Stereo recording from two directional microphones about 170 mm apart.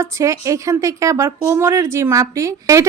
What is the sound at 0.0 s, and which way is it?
A woman's voice, 20° right (ahead or behind).